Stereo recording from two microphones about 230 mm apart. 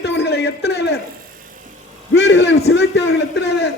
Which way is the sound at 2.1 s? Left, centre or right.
Left.